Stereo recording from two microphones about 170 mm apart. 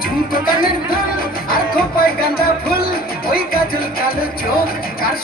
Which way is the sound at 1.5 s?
60° left (ahead or behind).